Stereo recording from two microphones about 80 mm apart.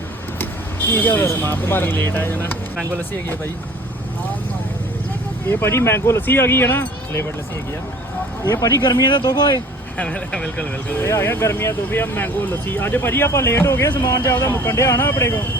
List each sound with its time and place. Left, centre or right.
0.9 s speech: left
5.5 s speech: left
8.8 s speech: left
10.0 s speech: centre
11.0 s speech: left